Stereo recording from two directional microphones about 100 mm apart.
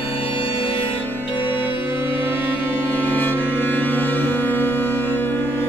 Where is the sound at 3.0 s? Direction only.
20° left (ahead or behind).